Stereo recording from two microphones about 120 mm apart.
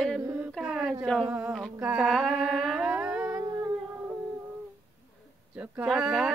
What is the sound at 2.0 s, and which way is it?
Humming, centre (ahead or behind).